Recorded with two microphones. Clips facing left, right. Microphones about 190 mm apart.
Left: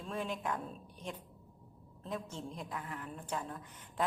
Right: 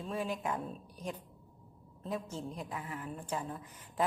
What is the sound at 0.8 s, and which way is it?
Speech, 35° right (ahead or behind).